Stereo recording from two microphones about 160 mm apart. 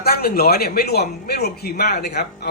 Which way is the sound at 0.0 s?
75° left (ahead or behind).